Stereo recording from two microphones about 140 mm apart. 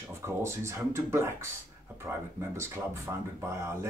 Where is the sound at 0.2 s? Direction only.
20° right (ahead or behind).